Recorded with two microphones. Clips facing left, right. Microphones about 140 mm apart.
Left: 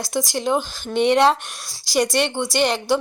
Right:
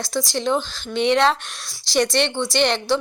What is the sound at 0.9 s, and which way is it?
Speech, 45° left (ahead or behind).